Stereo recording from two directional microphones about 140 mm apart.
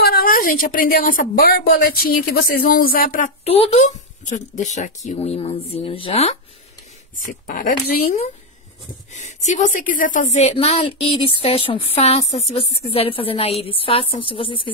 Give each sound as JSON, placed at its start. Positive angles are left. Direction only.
{"t": 0.0, "sound": "a woman's voice", "side_deg": 90}
{"t": 3.4, "sound": "speech", "side_deg": 45}
{"t": 7.2, "sound": "speech", "side_deg": 70}
{"t": 9.1, "sound": "speech", "side_deg": 60}
{"t": 10.5, "sound": "speech", "side_deg": 45}